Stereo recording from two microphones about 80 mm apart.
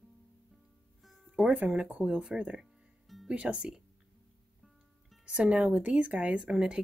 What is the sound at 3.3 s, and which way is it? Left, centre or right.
Speech, centre.